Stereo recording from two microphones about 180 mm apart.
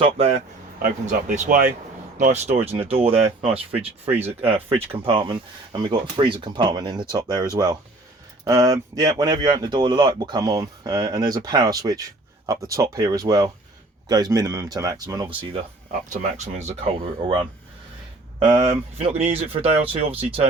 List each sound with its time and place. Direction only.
0.0 s speech: 35° right (ahead or behind)
0.8 s speech: 45° right (ahead or behind)
2.6 s speech: 10° right (ahead or behind)
2.9 s speech: 30° right (ahead or behind)
3.7 s speech: 10° right (ahead or behind)
4.4 s speech: 30° right (ahead or behind)
16.0 s speech: 40° right (ahead or behind)
18.3 s speech: 30° right (ahead or behind)